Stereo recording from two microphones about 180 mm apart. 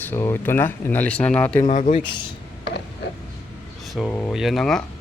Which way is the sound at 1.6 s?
40° left (ahead or behind).